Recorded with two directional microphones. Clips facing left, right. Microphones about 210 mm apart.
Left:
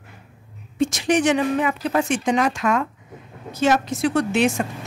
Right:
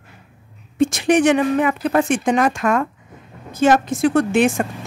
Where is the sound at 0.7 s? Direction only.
55° right (ahead or behind).